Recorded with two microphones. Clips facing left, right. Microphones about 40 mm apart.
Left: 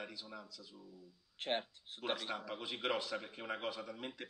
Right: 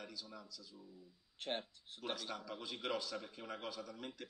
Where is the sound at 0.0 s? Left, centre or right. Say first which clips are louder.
Left 3 dB; left.